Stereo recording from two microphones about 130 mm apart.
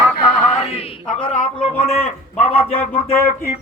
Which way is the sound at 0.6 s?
50° left (ahead or behind).